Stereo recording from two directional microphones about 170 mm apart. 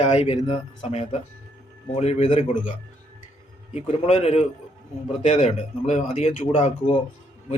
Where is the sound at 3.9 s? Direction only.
40° left (ahead or behind).